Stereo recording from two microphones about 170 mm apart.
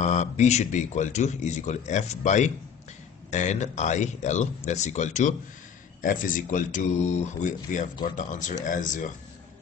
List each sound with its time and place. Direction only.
0.0 s speech: 45° left (ahead or behind)